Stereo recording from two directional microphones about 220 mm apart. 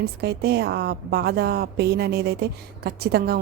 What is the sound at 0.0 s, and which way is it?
A woman's voice, 50° right (ahead or behind).